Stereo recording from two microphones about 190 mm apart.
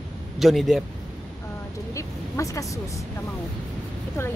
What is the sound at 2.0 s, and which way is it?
Speech, 15° left (ahead or behind).